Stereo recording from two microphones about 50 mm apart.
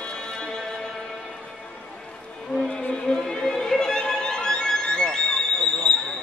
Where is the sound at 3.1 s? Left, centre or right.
Centre.